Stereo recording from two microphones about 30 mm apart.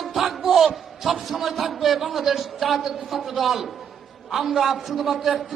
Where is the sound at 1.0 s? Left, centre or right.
Centre.